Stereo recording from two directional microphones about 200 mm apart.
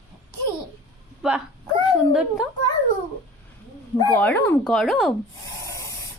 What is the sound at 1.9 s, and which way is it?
Speech, 5° right (ahead or behind).